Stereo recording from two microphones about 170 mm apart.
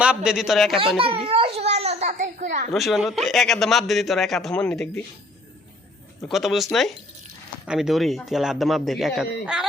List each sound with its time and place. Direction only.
0.0 s a man's voice: 5° right (ahead or behind)
0.9 s baby cry: 30° right (ahead or behind)
2.7 s a man's voice: centre (ahead or behind)
6.2 s a man's voice: centre (ahead or behind)